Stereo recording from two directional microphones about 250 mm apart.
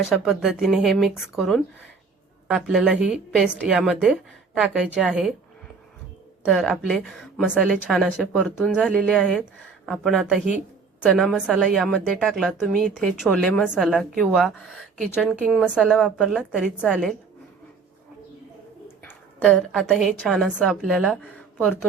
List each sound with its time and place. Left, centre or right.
0.0 s a woman's voice: centre
6.4 s a woman's voice: centre
19.5 s a woman's voice: centre